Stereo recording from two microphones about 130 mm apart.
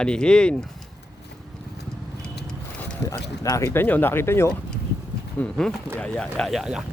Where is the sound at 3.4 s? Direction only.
25° left (ahead or behind).